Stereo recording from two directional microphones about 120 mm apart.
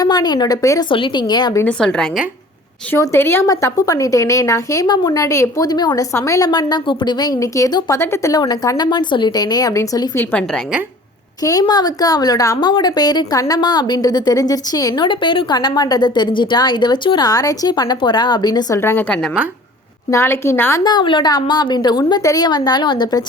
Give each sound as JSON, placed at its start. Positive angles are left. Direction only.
{"t": 0.0, "sound": "a woman's voice", "side_deg": 35}
{"t": 0.9, "sound": "a woman's voice", "side_deg": 45}
{"t": 1.6, "sound": "a woman's voice", "side_deg": 5}
{"t": 2.9, "sound": "a woman's voice", "side_deg": 20}
{"t": 6.1, "sound": "a woman's voice", "side_deg": 25}
{"t": 11.4, "sound": "a woman's voice", "side_deg": 30}
{"t": 15.0, "sound": "a woman's voice", "side_deg": 45}
{"t": 18.8, "sound": "a woman's voice", "side_deg": 20}
{"t": 20.8, "sound": "a woman's voice", "side_deg": 40}